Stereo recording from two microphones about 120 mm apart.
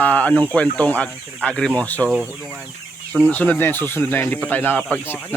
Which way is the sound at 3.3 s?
10° left (ahead or behind).